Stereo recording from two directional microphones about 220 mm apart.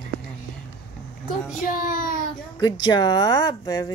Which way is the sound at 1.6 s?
40° left (ahead or behind).